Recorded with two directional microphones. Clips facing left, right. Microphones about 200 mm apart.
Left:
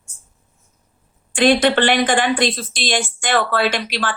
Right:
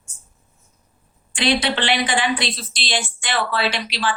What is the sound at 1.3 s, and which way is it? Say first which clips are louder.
A woman's voice: left 7 dB; 50° left (ahead or behind).